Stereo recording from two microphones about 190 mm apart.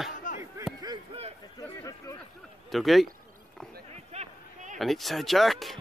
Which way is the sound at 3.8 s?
35° right (ahead or behind).